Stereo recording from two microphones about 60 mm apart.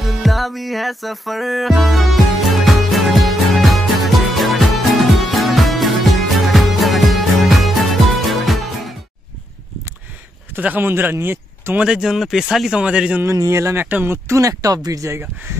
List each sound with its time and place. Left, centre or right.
0.0 s music: centre
10.6 s speech: right
11.8 s speech: centre
12.7 s a man's voice: centre
13.5 s speech: right
13.7 s speech: right
14.0 s speech: right